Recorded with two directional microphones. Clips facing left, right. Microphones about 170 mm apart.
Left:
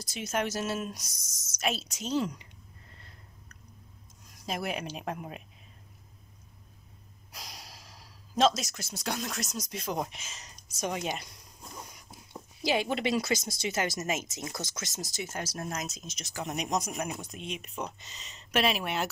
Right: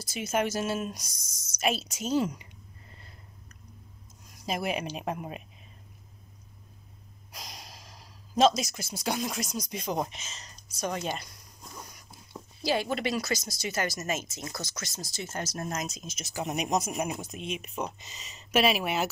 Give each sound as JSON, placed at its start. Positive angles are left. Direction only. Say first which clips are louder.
{"t": 0.0, "sound": "speech", "louder": "right 3 dB", "side_deg": 0}
{"t": 4.5, "sound": "speech", "louder": "right 3 dB", "side_deg": -5}
{"t": 7.3, "sound": "gasp", "louder": "right 2 dB", "side_deg": 5}
{"t": 8.4, "sound": "speech", "louder": "right 3 dB", "side_deg": 0}
{"t": 12.6, "sound": "speech", "louder": "even", "side_deg": 15}
{"t": 15.3, "sound": "speech", "louder": "right 3 dB", "side_deg": 5}